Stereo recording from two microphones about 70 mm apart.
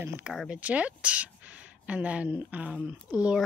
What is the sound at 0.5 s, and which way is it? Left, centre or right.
A woman's voice, centre.